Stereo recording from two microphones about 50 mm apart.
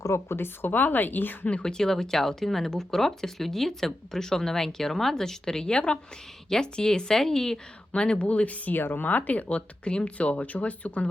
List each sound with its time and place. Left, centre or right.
0.1 s a woman's voice: left
0.7 s speech: left
1.5 s speech: left
1.8 s speech: centre
7.9 s speech: left
8.8 s a woman's voice: left
9.0 s speech: left